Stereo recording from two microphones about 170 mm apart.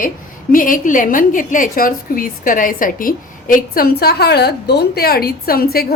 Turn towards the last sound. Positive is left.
turn(degrees=65)  # may be behind; listen again after turning